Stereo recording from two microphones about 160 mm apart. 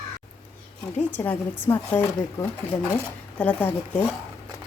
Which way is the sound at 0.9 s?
10° left (ahead or behind).